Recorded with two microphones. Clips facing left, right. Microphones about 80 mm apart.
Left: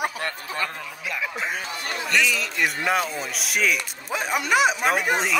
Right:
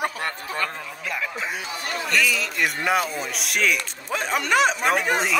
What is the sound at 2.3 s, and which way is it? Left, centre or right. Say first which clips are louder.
Speech: even; centre.